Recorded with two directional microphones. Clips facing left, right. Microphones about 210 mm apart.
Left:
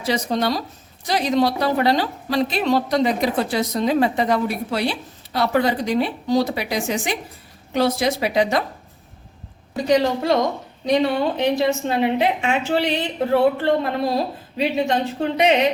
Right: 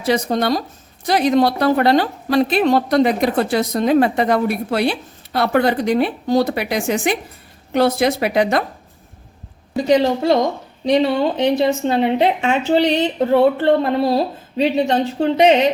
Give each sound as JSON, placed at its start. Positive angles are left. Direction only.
{"t": 0.0, "sound": "a woman's voice", "side_deg": -55}
{"t": 9.8, "sound": "a woman's voice", "side_deg": -25}